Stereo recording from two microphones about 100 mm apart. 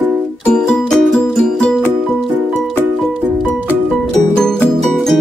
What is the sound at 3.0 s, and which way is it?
Music, 5° left (ahead or behind).